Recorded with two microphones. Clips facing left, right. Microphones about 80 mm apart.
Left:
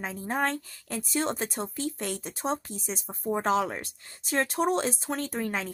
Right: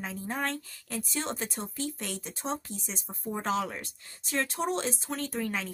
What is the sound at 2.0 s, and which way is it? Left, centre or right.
Speech, left.